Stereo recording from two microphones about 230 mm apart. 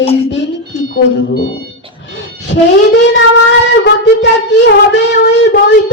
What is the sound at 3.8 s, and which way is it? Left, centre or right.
Child singing, left.